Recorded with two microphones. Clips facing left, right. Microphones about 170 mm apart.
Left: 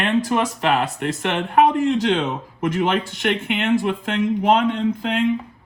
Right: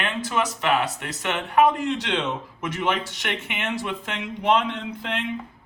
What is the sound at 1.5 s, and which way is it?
Speech, 45° left (ahead or behind).